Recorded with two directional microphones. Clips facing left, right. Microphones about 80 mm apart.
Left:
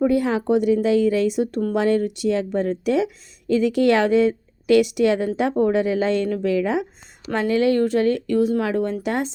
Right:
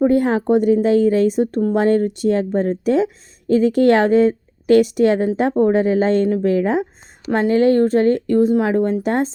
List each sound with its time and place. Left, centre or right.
0.0 s a woman's voice: right